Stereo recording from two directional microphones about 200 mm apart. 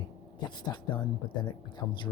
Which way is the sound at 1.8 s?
10° left (ahead or behind).